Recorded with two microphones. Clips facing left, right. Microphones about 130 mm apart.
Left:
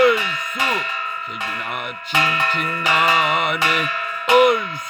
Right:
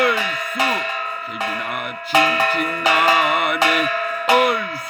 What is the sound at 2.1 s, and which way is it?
Tubular bells, 40° right (ahead or behind).